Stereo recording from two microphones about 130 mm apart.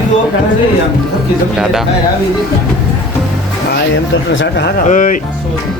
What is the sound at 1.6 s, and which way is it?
Speech, 5° right (ahead or behind).